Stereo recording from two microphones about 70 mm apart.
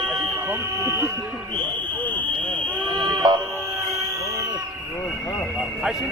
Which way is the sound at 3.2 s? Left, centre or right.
Right.